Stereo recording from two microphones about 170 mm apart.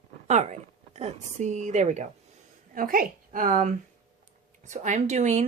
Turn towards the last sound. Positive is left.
turn(degrees=-45)  # may be behind; listen again after turning